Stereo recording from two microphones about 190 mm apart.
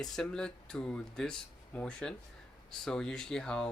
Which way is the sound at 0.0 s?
5° left (ahead or behind).